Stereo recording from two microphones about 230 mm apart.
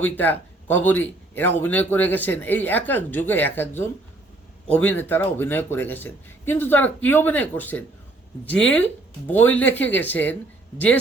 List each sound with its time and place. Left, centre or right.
0.0 s speech: centre